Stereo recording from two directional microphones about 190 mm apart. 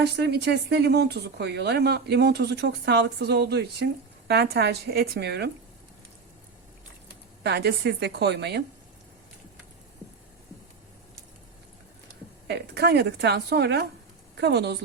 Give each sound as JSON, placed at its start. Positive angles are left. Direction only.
{"t": 0.0, "sound": "speech", "side_deg": -60}
{"t": 7.4, "sound": "speech", "side_deg": -60}
{"t": 12.5, "sound": "speech", "side_deg": -60}